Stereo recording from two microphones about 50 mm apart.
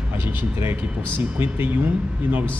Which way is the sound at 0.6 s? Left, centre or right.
Right.